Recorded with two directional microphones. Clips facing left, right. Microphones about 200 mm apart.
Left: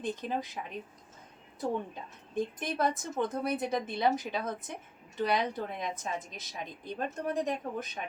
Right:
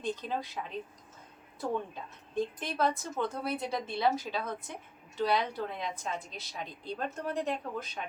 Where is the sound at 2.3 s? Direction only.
20° left (ahead or behind).